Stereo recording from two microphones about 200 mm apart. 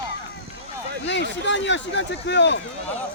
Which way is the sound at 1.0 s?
60° left (ahead or behind).